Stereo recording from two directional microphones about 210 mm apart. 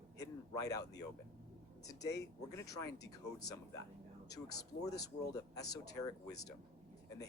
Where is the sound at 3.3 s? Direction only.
15° left (ahead or behind).